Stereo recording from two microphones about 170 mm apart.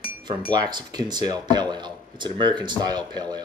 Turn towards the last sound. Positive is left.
turn(degrees=-25)  # may be behind; listen again after turning